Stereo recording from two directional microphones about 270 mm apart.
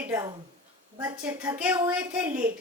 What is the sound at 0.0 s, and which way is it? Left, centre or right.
A woman's voice, centre.